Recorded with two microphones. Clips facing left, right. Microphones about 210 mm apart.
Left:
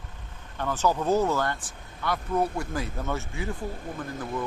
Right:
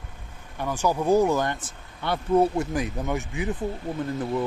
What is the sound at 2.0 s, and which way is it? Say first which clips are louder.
Speech: right 6 dB; 30° right (ahead or behind).